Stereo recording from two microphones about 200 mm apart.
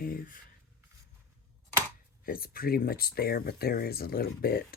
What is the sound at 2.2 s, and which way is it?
Speech, 45° left (ahead or behind).